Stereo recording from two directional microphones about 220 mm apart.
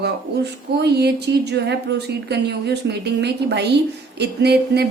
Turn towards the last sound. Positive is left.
turn(degrees=-50)  # may be behind; listen again after turning